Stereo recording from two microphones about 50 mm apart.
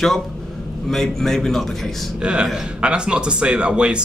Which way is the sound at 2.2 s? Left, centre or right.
Centre.